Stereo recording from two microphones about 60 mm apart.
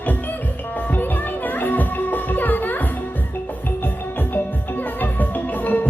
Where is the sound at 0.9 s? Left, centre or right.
Left.